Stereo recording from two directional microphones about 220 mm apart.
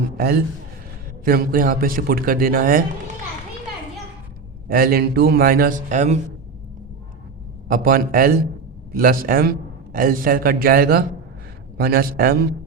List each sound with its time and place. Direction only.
0.2 s a man's voice: 45° right (ahead or behind)
4.7 s a man's voice: 40° right (ahead or behind)
7.7 s a man's voice: 40° right (ahead or behind)